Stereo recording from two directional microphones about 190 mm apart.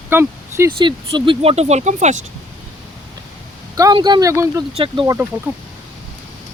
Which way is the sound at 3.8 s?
20° right (ahead or behind).